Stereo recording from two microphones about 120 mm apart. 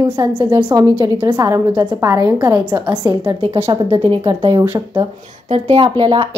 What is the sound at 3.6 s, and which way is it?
Speech, 50° right (ahead or behind).